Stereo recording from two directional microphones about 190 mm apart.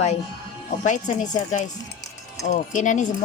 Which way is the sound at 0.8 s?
40° left (ahead or behind).